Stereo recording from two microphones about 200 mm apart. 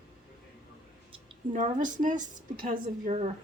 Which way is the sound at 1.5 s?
40° right (ahead or behind).